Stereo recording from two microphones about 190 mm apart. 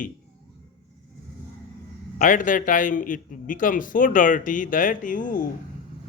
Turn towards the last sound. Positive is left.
turn(degrees=45)  # may be behind; listen again after turning